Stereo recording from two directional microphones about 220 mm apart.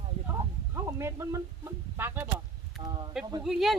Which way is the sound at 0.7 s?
10° right (ahead or behind).